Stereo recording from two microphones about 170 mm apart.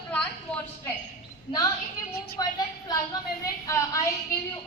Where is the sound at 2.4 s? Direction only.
20° left (ahead or behind).